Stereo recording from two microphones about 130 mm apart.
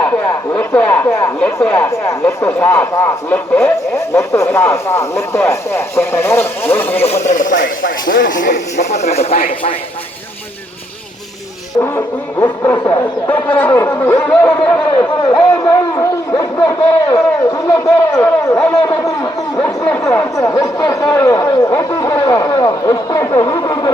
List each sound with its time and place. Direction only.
0.0 s a man's voice: 10° left (ahead or behind)
1.9 s speech: 25° left (ahead or behind)
3.9 s a man's voice: 25° left (ahead or behind)
7.0 s speech: 55° left (ahead or behind)
7.3 s speech: 90° left; by 9.4 s 55° left (ahead or behind)
11.8 s a man's voice: 20° left (ahead or behind)
16.4 s speech: 25° left (ahead or behind)